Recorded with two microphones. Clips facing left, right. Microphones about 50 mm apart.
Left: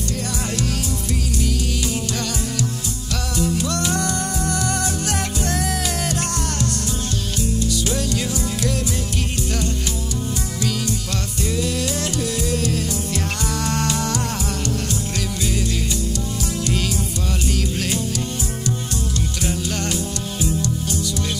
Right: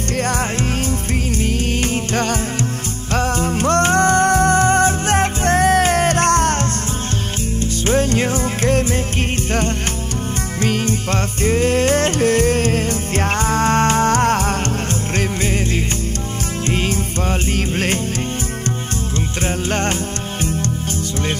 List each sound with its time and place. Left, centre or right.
0.2 s music: right
7.8 s music: right
10.6 s music: right
16.6 s music: right
19.1 s music: right